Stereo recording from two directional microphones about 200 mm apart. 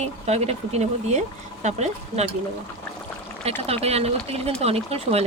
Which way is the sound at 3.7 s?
30° right (ahead or behind).